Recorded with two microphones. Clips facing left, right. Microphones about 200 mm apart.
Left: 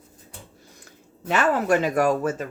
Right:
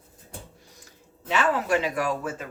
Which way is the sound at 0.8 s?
50° left (ahead or behind).